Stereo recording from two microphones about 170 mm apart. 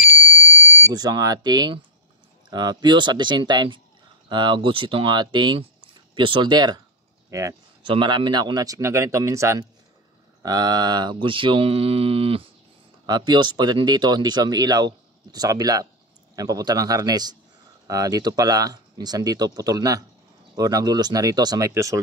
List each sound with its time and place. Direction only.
0.0 s fire alarm: 10° right (ahead or behind)
0.7 s smoke detector: 15° right (ahead or behind)
0.9 s speech: 25° right (ahead or behind)
7.2 s a sound: 20° right (ahead or behind)
7.9 s speech: 30° right (ahead or behind)
13.0 s speech: 25° right (ahead or behind)